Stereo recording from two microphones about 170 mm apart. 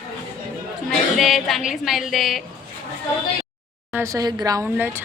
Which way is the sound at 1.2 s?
Centre (ahead or behind).